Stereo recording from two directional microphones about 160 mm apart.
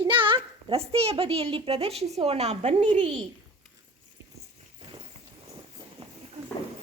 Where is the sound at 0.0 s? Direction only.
30° right (ahead or behind).